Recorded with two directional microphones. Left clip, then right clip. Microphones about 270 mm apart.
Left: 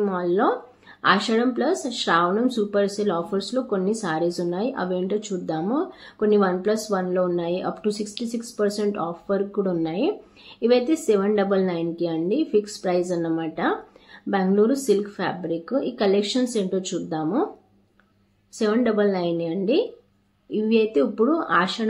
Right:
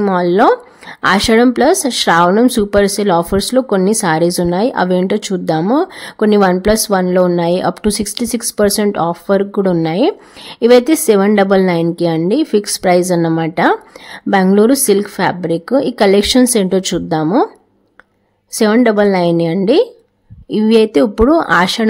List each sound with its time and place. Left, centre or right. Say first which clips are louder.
0.0 s speech: right 11 dB; right
18.6 s speech: right 10 dB; right